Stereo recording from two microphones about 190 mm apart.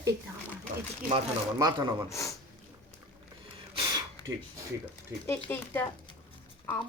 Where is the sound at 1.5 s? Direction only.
20° right (ahead or behind).